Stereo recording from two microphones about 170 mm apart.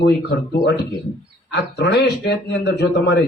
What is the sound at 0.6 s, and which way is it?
Speech, 75° left (ahead or behind).